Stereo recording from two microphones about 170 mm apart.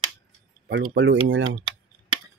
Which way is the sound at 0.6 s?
80° right.